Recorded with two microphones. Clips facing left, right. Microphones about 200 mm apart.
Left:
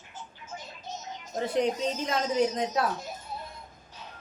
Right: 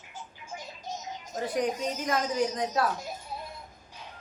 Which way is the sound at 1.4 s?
25° left (ahead or behind).